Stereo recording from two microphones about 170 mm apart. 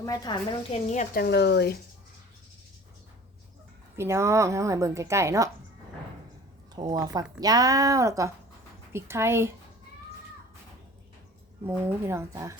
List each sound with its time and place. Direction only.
0.0 s a woman's voice: 20° left (ahead or behind)
0.7 s a woman's voice: 45° left (ahead or behind)
1.1 s speech: 70° left (ahead or behind)
3.9 s a woman's voice: 15° right (ahead or behind)
6.7 s a woman's voice: 20° right (ahead or behind)
11.6 s a woman's voice: 15° right (ahead or behind)